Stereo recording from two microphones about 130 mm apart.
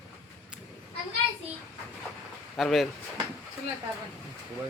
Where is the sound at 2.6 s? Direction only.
Centre (ahead or behind).